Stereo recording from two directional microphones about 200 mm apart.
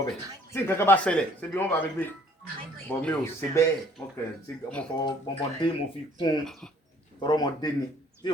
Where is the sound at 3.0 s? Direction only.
10° left (ahead or behind).